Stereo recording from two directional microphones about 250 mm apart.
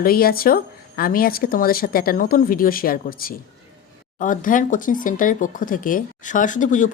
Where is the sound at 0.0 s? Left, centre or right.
Left.